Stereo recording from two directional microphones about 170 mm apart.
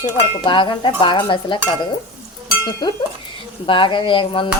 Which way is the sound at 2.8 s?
25° left (ahead or behind).